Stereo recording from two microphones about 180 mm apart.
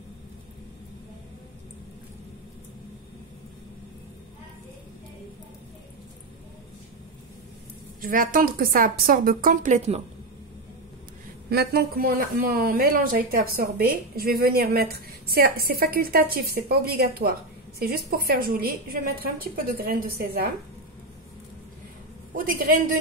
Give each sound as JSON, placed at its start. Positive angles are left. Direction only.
{"t": 8.0, "sound": "a woman's voice", "side_deg": -50}
{"t": 11.5, "sound": "speech", "side_deg": -60}
{"t": 22.3, "sound": "a woman's voice", "side_deg": -50}